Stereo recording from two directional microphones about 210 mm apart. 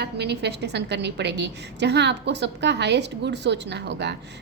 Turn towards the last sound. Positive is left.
turn(degrees=-55)  # may be behind; listen again after turning